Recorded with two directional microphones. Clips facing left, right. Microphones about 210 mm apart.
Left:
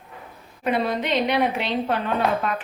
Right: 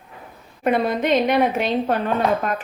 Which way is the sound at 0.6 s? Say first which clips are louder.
Right 4 dB; 50° right (ahead or behind).